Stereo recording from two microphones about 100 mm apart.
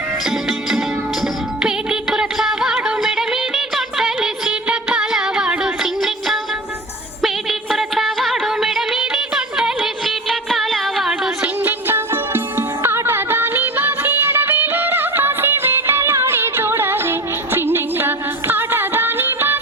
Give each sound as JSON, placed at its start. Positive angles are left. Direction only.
{"t": 0.3, "sound": "music", "side_deg": 0}
{"t": 7.7, "sound": "music", "side_deg": -5}
{"t": 10.5, "sound": "a sound", "side_deg": 0}
{"t": 11.6, "sound": "music", "side_deg": -20}